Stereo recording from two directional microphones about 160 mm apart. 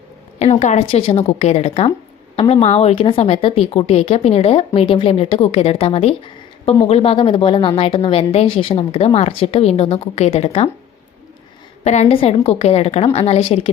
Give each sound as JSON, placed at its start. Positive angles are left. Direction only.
{"t": 0.3, "sound": "speech", "side_deg": 45}
{"t": 11.8, "sound": "speech", "side_deg": 45}